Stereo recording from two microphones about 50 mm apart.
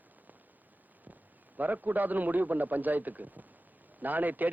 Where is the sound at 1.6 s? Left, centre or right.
Right.